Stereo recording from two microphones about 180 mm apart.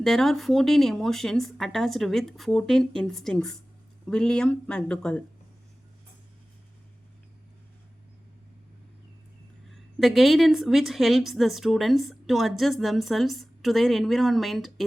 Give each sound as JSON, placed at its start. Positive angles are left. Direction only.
{"t": 0.0, "sound": "a woman's voice", "side_deg": 0}
{"t": 10.0, "sound": "a woman's voice", "side_deg": 0}